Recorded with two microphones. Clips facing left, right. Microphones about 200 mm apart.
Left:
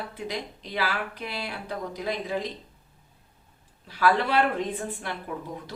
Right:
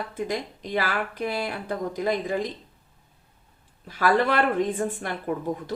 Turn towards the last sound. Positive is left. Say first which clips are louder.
# right 7 dB
turn(degrees=-50)  # may be behind; listen again after turning